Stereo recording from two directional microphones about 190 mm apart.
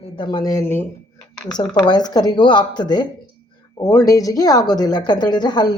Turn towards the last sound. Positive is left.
turn(degrees=20)  # may be behind; listen again after turning